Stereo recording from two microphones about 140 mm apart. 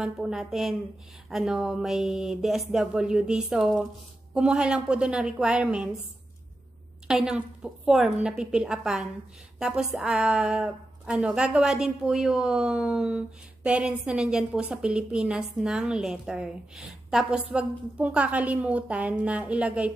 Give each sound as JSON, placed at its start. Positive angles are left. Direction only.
{"t": 0.0, "sound": "a woman's voice", "side_deg": -5}
{"t": 7.1, "sound": "a woman's voice", "side_deg": -5}